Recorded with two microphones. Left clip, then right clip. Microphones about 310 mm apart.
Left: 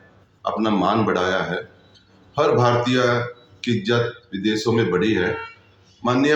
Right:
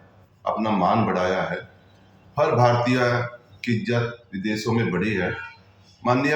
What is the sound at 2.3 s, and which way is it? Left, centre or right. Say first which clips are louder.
Speech: left 2 dB; centre.